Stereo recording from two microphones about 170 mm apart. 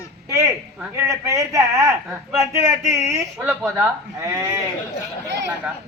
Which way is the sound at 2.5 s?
15° right (ahead or behind).